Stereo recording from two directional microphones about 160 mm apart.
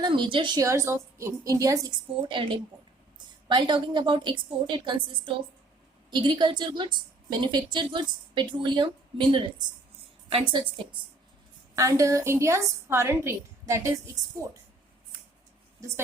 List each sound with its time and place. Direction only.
0.0 s a woman's voice: 30° right (ahead or behind)
11.8 s a woman's voice: 20° right (ahead or behind)